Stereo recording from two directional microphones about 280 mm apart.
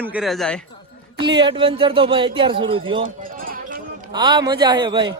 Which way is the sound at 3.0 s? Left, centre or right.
Right.